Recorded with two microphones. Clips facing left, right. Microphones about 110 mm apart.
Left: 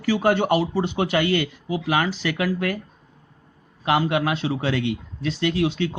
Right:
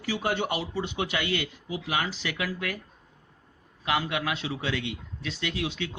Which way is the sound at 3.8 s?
35° left (ahead or behind).